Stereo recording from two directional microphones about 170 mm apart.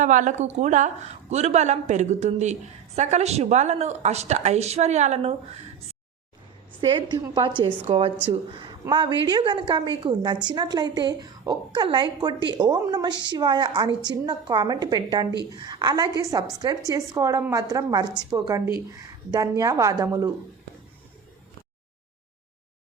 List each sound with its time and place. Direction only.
0.0 s a woman's voice: 50° right (ahead or behind)
6.8 s a woman's voice: 25° right (ahead or behind)